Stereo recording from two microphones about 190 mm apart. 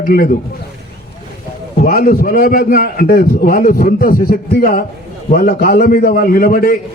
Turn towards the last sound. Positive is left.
turn(degrees=50)  # may be behind; listen again after turning